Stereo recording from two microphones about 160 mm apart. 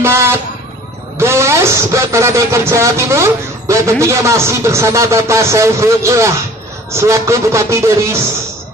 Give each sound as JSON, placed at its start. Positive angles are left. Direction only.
{"t": 0.0, "sound": "vehicle", "side_deg": -15}
{"t": 1.2, "sound": "speech", "side_deg": -15}